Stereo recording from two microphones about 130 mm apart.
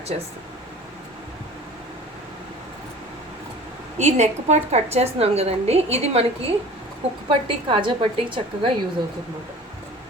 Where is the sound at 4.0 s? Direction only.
60° right (ahead or behind).